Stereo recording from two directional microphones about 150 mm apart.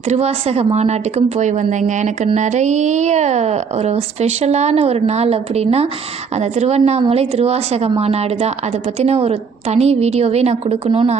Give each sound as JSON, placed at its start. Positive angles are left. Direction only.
{"t": 0.1, "sound": "a woman's voice", "side_deg": -45}